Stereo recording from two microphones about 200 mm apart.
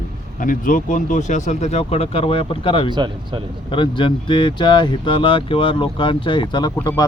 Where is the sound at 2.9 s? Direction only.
25° right (ahead or behind).